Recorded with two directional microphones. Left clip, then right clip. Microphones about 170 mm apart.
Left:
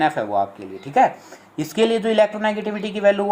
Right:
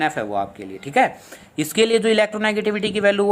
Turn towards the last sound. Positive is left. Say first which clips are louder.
# even
turn(degrees=-50)  # may be behind; listen again after turning